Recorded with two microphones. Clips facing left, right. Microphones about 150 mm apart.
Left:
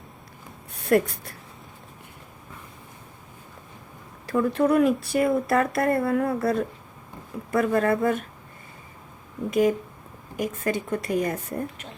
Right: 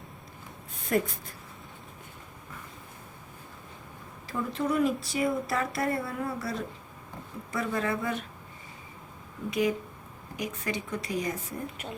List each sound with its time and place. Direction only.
0.9 s speech: 70° left (ahead or behind)
4.3 s speech: 65° left (ahead or behind)
9.5 s speech: 45° left (ahead or behind)